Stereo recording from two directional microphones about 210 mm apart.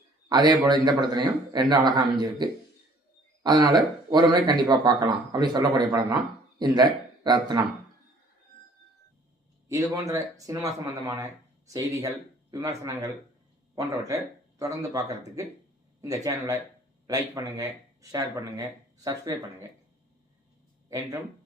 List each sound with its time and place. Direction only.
0.3 s a man's voice: 20° right (ahead or behind)
7.3 s a man's voice: 20° right (ahead or behind)
9.6 s speech: 15° right (ahead or behind)